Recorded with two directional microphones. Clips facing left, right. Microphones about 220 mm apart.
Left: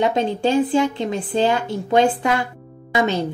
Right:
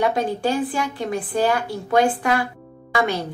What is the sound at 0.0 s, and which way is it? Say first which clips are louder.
A woman's voice: left 2 dB; 25° left (ahead or behind).